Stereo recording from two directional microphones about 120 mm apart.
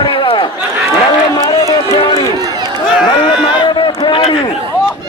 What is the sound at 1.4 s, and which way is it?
Run, 30° left (ahead or behind).